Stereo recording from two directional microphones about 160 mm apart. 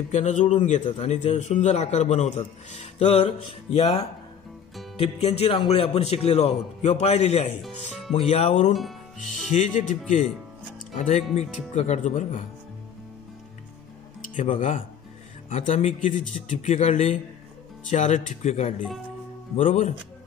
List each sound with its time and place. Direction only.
0.1 s a man's voice: 50° left (ahead or behind)
14.3 s a man's voice: 50° left (ahead or behind)